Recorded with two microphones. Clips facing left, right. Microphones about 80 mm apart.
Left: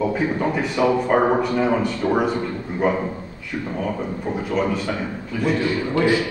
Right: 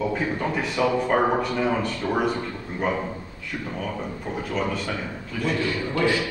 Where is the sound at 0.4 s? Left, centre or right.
Centre.